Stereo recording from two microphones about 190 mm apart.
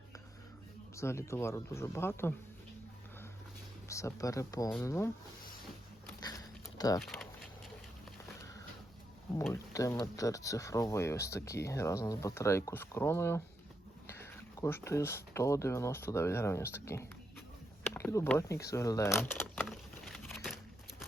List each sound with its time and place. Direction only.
0.9 s speech: 15° left (ahead or behind)
3.8 s speech: 15° left (ahead or behind)
6.2 s a sound: 20° left (ahead or behind)
7.0 s speech: centre (ahead or behind)
9.5 s speech: 15° left (ahead or behind)
19.6 s a sound: centre (ahead or behind)